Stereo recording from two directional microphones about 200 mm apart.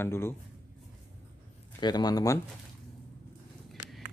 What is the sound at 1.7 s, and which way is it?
Speech, 20° left (ahead or behind).